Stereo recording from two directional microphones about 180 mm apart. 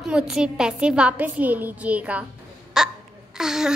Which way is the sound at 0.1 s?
5° right (ahead or behind).